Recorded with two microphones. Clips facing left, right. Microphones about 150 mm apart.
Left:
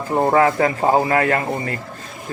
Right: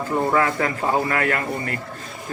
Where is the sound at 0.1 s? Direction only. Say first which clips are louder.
Left 5 dB; 35° left (ahead or behind).